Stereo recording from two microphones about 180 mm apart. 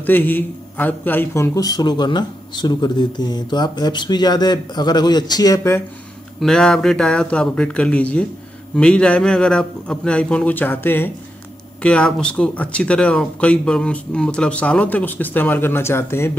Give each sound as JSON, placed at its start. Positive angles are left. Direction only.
{"t": 0.0, "sound": "a man's voice", "side_deg": 10}
{"t": 6.4, "sound": "speech", "side_deg": 5}